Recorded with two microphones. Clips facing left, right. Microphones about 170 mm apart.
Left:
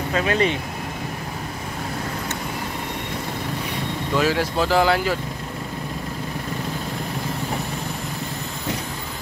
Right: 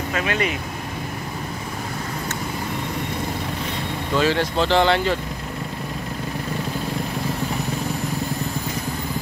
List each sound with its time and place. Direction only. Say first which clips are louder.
0.1 s speech: left 4 dB; 30° left (ahead or behind)
4.1 s speech: right 1 dB; 5° left (ahead or behind)